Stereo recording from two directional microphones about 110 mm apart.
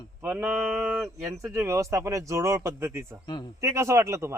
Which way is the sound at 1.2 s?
25° right (ahead or behind).